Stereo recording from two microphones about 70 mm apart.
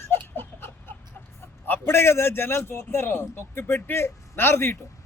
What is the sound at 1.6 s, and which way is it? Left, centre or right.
A man's voice, left.